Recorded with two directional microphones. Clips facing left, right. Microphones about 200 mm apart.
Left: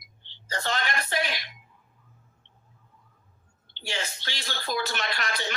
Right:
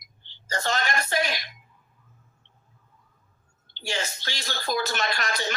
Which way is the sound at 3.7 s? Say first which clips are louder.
Right 3 dB; 45° right (ahead or behind).